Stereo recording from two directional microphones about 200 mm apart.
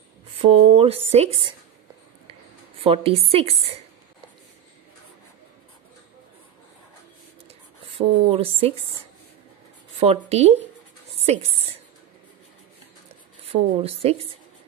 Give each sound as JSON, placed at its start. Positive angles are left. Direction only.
{"t": 0.4, "sound": "speech", "side_deg": -30}
{"t": 2.8, "sound": "a woman's voice", "side_deg": -30}
{"t": 8.3, "sound": "a woman's voice", "side_deg": -30}
{"t": 9.9, "sound": "speech", "side_deg": -30}
{"t": 13.5, "sound": "a woman's voice", "side_deg": -30}